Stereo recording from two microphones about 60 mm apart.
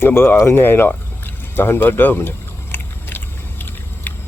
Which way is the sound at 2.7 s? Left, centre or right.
Left.